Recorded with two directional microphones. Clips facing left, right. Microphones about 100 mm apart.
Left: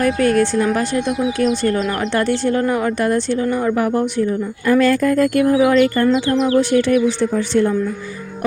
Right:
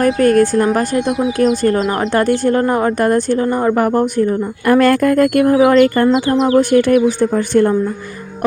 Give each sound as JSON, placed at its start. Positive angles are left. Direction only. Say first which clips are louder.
{"t": 0.0, "sound": "speech", "louder": "right 4 dB", "side_deg": -45}